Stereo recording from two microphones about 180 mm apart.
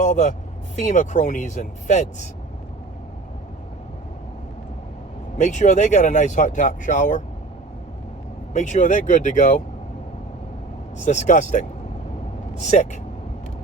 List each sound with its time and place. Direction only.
0.0 s speech: 40° left (ahead or behind)
5.4 s speech: 40° left (ahead or behind)
8.5 s speech: 40° left (ahead or behind)
11.0 s speech: 40° left (ahead or behind)